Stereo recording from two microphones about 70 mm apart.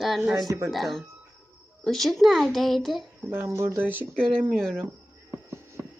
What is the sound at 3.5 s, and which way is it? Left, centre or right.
Speech, right.